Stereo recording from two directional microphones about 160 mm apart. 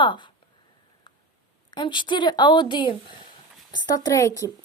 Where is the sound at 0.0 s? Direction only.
30° left (ahead or behind).